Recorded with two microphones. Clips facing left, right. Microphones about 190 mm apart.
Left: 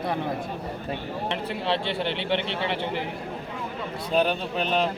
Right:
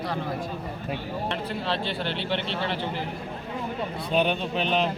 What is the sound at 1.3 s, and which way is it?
Speech, 20° left (ahead or behind).